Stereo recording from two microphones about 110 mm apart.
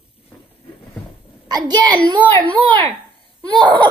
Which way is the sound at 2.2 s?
15° left (ahead or behind).